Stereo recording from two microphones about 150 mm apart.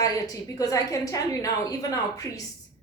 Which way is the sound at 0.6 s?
20° left (ahead or behind).